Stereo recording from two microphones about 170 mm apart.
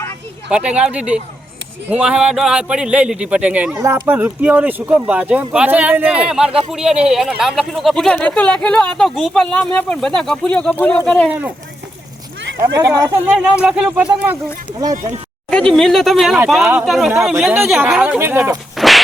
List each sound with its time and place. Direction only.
0.5 s speech: 5° right (ahead or behind)
3.8 s speech: 20° right (ahead or behind); by 11.3 s 5° left (ahead or behind)
11.3 s speech: 10° right (ahead or behind)
12.5 s speech: 20° right (ahead or behind)
13.3 s speech: 5° right (ahead or behind)
15.4 s speech: 5° left (ahead or behind); by 18.5 s 10° right (ahead or behind)
18.8 s a sound: centre (ahead or behind)